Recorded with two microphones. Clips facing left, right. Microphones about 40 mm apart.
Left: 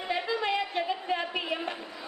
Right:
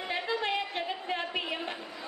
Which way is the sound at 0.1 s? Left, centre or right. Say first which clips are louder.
Left 2 dB; centre.